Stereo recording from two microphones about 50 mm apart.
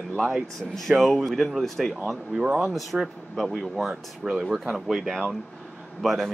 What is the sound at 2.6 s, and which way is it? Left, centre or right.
Speech, centre.